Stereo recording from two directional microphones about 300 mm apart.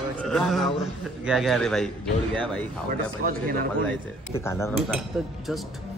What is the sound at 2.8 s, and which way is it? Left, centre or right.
Speech, right.